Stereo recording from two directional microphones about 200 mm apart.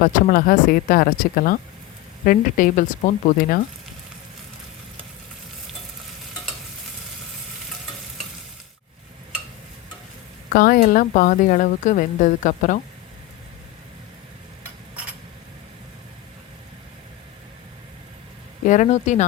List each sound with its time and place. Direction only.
0.0 s a woman's voice: 40° left (ahead or behind)
10.5 s a woman's voice: 45° left (ahead or behind)
18.6 s a woman's voice: 40° left (ahead or behind)